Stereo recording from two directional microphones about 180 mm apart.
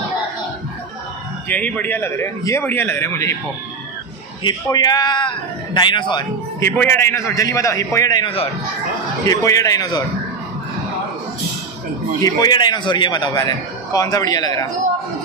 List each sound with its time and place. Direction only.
1.5 s a man's voice: 10° left (ahead or behind)
4.4 s a man's voice: 25° left (ahead or behind)
6.6 s a man's voice: 15° left (ahead or behind)
9.2 s a man's voice: 15° left (ahead or behind)
12.2 s a man's voice: 20° left (ahead or behind)